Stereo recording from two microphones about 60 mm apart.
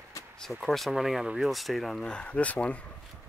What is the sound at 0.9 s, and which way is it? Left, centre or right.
Speech, centre.